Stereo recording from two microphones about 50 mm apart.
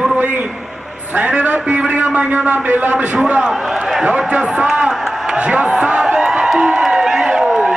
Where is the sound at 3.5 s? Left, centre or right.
Centre.